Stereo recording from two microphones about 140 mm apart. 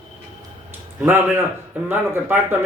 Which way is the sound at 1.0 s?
15° right (ahead or behind).